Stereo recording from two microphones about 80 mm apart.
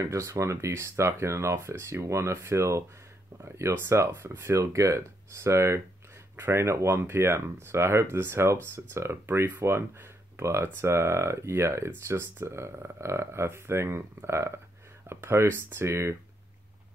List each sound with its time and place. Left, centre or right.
0.0 s speech: right